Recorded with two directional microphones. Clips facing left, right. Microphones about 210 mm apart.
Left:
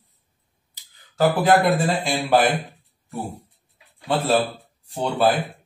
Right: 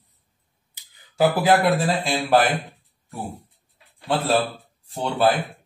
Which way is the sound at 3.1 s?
Centre (ahead or behind).